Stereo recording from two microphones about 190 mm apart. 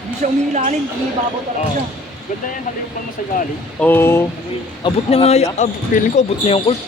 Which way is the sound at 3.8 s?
10° left (ahead or behind).